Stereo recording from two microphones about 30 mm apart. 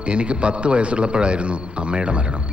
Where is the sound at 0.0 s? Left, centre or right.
Right.